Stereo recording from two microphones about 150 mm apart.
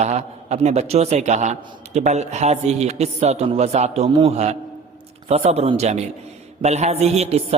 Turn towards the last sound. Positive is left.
turn(degrees=-45)  # may be behind; listen again after turning